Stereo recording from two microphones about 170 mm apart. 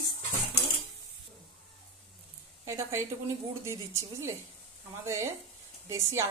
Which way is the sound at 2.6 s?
15° right (ahead or behind).